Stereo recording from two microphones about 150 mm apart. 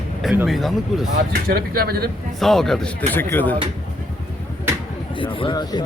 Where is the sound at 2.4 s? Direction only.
Centre (ahead or behind).